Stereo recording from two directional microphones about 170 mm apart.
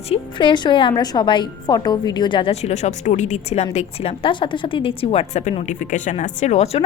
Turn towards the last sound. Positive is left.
turn(degrees=40)  # may be behind; listen again after turning